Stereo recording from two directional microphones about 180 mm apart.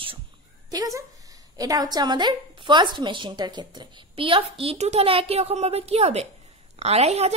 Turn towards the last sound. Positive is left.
turn(degrees=-35)  # may be behind; listen again after turning